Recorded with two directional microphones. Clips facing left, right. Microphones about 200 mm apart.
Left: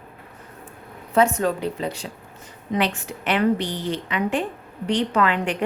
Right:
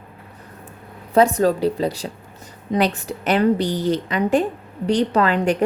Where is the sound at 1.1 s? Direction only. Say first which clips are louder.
Right 4 dB; 35° right (ahead or behind).